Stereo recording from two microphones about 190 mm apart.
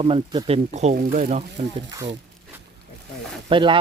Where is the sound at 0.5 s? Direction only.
40° right (ahead or behind).